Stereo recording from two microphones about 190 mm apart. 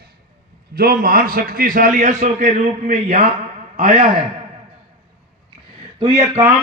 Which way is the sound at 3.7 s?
50° right (ahead or behind).